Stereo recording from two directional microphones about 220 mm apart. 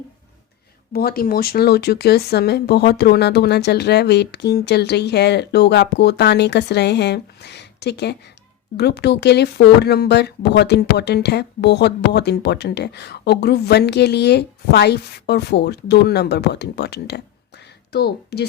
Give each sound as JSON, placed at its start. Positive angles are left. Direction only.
{"t": 0.9, "sound": "speech", "side_deg": 45}